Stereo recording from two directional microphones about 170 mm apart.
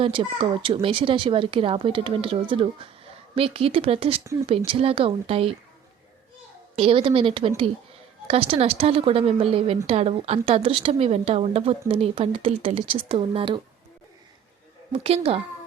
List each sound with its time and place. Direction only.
0.0 s speech: 30° right (ahead or behind)
6.7 s speech: 30° right (ahead or behind)
14.9 s speech: 35° right (ahead or behind)